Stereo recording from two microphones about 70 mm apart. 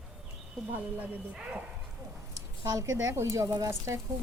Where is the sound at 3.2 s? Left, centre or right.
Right.